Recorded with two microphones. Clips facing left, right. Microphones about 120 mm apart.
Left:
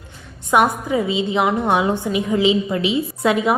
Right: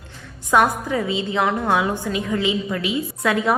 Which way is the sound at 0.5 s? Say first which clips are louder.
Left 1 dB; 15° left (ahead or behind).